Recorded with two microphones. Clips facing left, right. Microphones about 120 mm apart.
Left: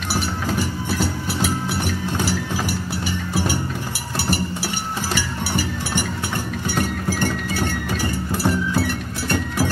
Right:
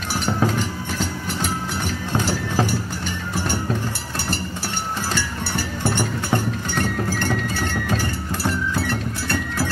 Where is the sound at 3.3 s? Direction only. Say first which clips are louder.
Left 2 dB; 10° left (ahead or behind).